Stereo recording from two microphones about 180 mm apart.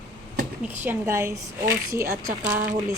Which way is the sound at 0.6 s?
10° right (ahead or behind).